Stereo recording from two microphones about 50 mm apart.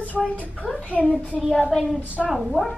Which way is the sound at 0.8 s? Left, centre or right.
Left.